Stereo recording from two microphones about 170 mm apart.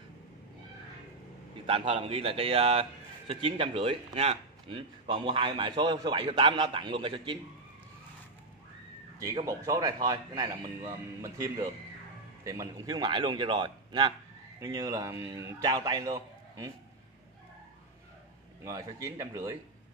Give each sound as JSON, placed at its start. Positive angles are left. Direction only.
{"t": 1.7, "sound": "a man's voice", "side_deg": -30}
{"t": 9.2, "sound": "a man's voice", "side_deg": -20}
{"t": 18.6, "sound": "a man's voice", "side_deg": -20}